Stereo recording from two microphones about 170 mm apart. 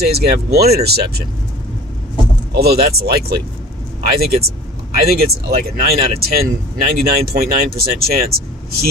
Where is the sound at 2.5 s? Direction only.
65° right (ahead or behind).